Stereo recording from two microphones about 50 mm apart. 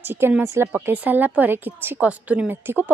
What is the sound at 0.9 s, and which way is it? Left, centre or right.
A woman's voice, right.